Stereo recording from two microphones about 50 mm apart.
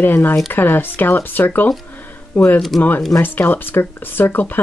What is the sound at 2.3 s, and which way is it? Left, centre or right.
Speech, left.